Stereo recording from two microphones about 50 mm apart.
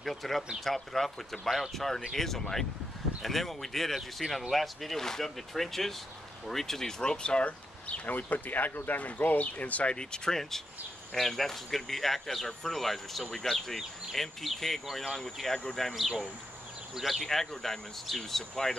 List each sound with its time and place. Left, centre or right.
0.0 s speech: centre; by 9.9 s left
9.9 s speech: centre
15.9 s speech: centre